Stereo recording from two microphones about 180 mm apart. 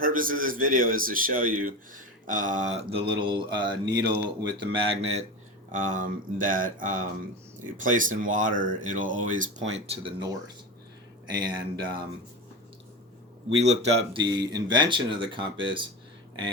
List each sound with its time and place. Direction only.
0.0 s a man's voice: 50° right (ahead or behind); by 4.6 s 20° right (ahead or behind)
4.7 s speech: 35° right (ahead or behind)
5.7 s a man's voice: 45° right (ahead or behind); by 11.5 s 25° right (ahead or behind)
13.6 s speech: 35° right (ahead or behind)